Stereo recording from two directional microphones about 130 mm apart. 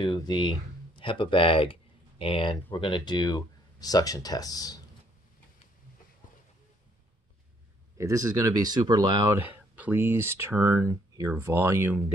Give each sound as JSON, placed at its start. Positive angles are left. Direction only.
{"t": 0.0, "sound": "speech", "side_deg": 35}
{"t": 8.0, "sound": "speech", "side_deg": -25}
{"t": 9.4, "sound": "speech", "side_deg": -15}